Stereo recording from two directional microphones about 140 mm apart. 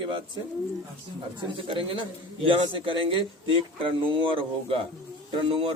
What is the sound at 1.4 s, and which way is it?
A man's voice, 40° right (ahead or behind).